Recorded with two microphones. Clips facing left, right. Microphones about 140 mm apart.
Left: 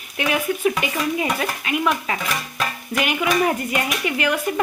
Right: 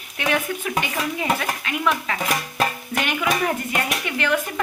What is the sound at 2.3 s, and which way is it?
Music, 35° right (ahead or behind).